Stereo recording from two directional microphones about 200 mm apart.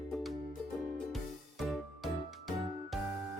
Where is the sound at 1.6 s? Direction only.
Centre (ahead or behind).